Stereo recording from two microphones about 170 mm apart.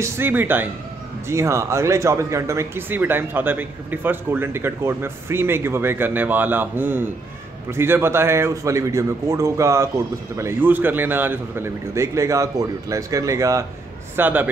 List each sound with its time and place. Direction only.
0.0 s a man's voice: 10° right (ahead or behind)